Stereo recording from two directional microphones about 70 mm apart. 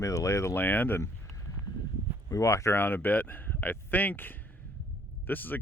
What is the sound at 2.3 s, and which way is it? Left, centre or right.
Speech, left.